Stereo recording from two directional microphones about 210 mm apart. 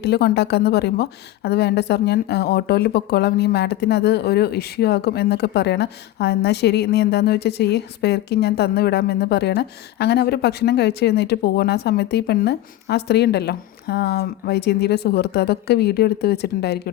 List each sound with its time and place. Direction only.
0.0 s a woman's voice: 50° left (ahead or behind)